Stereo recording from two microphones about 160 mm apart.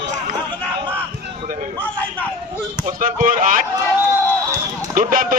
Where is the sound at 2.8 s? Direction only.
55° right (ahead or behind).